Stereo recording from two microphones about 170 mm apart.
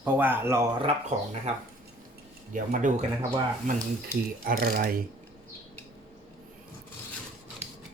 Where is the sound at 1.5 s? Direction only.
40° right (ahead or behind).